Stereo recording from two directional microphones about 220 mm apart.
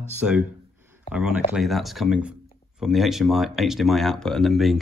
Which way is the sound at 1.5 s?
Centre (ahead or behind).